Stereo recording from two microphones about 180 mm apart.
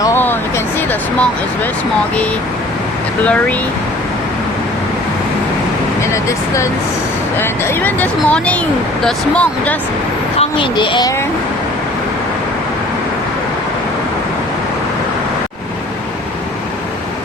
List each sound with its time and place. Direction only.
0.0 s a sound: 10° left (ahead or behind)
3.2 s speech: 10° left (ahead or behind)
6.1 s speech: 15° left (ahead or behind)
10.3 s speech: 25° left (ahead or behind)